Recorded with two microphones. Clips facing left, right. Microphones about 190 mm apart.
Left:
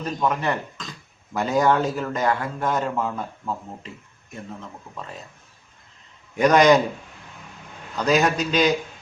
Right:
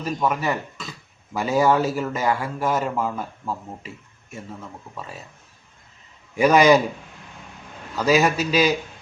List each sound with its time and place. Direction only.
0.0 s speech: 5° right (ahead or behind)
6.3 s speech: 5° right (ahead or behind)
7.9 s a man's voice: 5° right (ahead or behind)